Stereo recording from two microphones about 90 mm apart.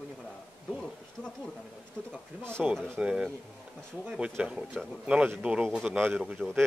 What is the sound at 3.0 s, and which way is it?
Speech, 5° right (ahead or behind).